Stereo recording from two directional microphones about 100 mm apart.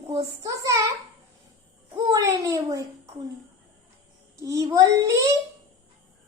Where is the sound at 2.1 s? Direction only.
30° right (ahead or behind).